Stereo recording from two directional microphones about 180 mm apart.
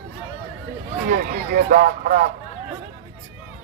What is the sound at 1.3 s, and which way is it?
Speech, 50° right (ahead or behind).